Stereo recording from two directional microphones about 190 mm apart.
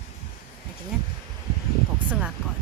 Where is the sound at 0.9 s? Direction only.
5° right (ahead or behind).